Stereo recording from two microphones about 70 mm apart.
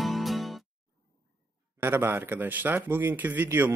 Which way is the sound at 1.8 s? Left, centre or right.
Right.